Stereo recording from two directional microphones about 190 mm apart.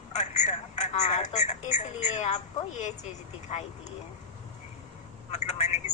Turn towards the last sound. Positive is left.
turn(degrees=35)  # may be behind; listen again after turning